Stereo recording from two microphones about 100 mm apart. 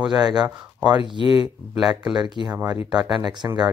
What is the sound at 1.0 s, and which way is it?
Speech, 60° left (ahead or behind).